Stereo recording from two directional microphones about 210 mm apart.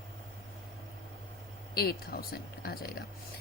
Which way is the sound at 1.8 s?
45° left (ahead or behind).